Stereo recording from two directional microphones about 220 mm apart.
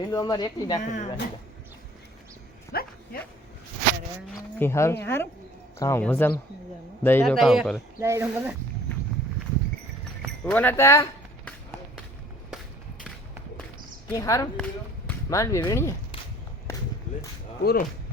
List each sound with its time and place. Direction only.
0.0 s speech: 20° left (ahead or behind)
0.8 s speech: 35° left (ahead or behind)
2.7 s speech: 45° left (ahead or behind)
4.6 s speech: 10° left (ahead or behind)
7.3 s speech: centre (ahead or behind)
8.0 s speech: 10° right (ahead or behind)
10.4 s speech: 10° left (ahead or behind)
14.1 s speech: 15° left (ahead or behind)
17.6 s speech: 45° left (ahead or behind)